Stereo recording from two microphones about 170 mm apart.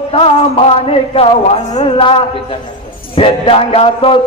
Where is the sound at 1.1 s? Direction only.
35° left (ahead or behind).